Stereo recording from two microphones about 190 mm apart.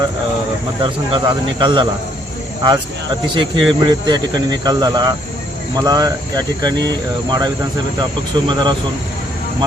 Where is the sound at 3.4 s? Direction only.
25° right (ahead or behind).